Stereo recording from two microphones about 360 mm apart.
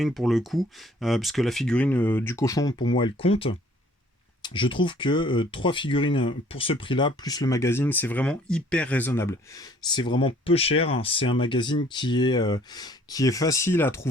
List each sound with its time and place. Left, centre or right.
0.0 s speech: centre